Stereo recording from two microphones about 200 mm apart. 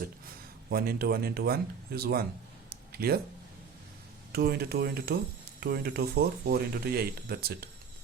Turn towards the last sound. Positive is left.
turn(degrees=-50)  # may be behind; listen again after turning